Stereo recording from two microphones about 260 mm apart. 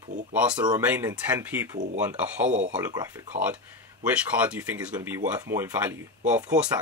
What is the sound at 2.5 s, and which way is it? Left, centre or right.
Speech, right.